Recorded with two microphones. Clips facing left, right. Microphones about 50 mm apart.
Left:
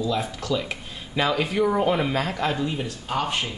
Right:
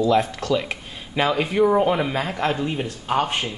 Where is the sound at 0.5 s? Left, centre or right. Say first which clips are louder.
Right 3 dB; centre.